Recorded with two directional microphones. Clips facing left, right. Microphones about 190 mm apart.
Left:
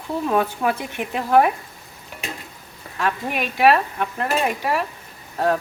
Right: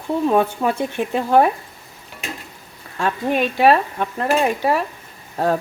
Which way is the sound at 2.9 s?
30° right (ahead or behind).